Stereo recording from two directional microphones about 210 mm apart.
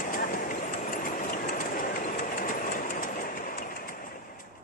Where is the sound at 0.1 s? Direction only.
40° left (ahead or behind).